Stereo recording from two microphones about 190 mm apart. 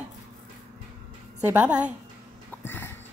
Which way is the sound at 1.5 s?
5° right (ahead or behind).